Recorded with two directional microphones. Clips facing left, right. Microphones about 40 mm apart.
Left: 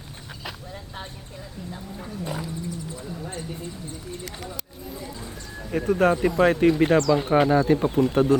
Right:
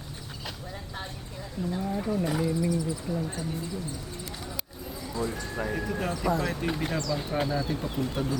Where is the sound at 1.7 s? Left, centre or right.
Centre.